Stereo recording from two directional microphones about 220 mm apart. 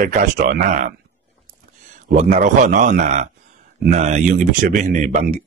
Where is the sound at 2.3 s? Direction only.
35° right (ahead or behind).